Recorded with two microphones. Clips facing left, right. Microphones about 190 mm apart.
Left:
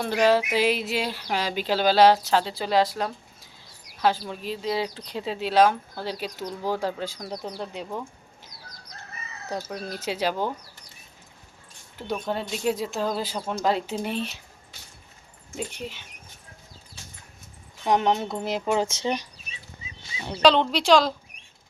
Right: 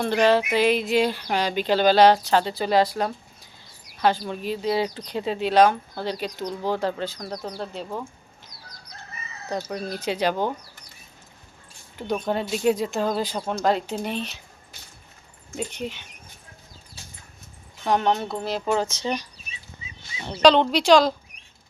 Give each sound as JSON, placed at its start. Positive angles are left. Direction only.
{"t": 0.0, "sound": "speech", "side_deg": 5}
{"t": 9.7, "sound": "speech", "side_deg": 5}
{"t": 11.9, "sound": "speech", "side_deg": 0}
{"t": 15.5, "sound": "speech", "side_deg": 5}
{"t": 17.8, "sound": "speech", "side_deg": 15}
{"t": 20.2, "sound": "speech", "side_deg": 0}